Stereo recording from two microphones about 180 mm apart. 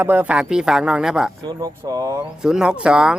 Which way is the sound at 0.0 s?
10° right (ahead or behind).